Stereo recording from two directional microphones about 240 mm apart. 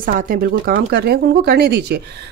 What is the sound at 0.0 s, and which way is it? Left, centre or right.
Speech, right.